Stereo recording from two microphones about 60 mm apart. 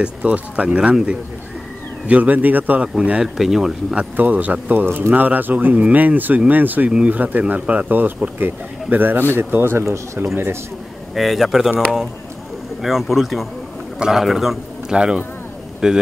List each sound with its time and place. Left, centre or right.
0.0 s speech: right
2.0 s speech: right
2.9 s speech: centre
4.2 s a man's voice: right
11.1 s speech: centre
12.8 s a man's voice: centre